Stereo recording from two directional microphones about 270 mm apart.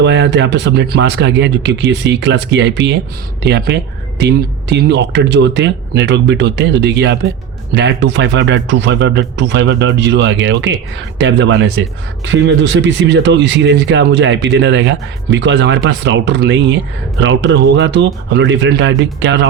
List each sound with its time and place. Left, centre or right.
0.0 s speech: right